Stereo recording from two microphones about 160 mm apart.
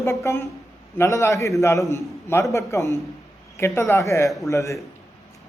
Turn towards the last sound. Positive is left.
turn(degrees=20)  # may be behind; listen again after turning